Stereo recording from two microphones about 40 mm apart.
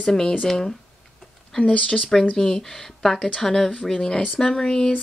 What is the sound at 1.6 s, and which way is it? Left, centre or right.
Speech, left.